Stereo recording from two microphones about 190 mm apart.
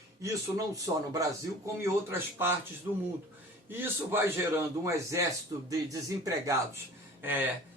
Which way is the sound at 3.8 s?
10° right (ahead or behind).